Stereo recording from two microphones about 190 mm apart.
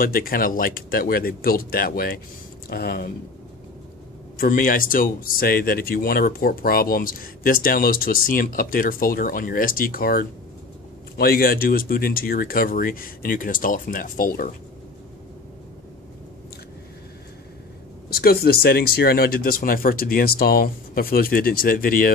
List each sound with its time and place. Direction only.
0.0 s speech: 50° left (ahead or behind)
4.4 s speech: 50° left (ahead or behind)
18.1 s speech: 55° left (ahead or behind)